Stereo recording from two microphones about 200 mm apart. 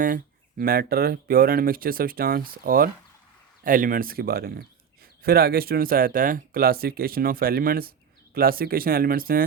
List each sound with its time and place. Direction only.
0.6 s speech: 50° right (ahead or behind)